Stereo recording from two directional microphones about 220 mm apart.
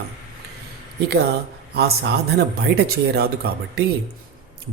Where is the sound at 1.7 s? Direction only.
45° right (ahead or behind).